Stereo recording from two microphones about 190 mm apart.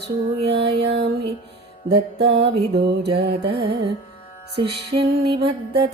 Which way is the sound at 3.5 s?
25° right (ahead or behind).